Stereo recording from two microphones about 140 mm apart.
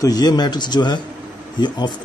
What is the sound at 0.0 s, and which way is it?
Speech, 25° left (ahead or behind).